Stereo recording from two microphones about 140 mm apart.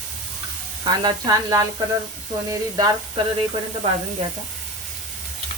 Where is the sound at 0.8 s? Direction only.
25° right (ahead or behind).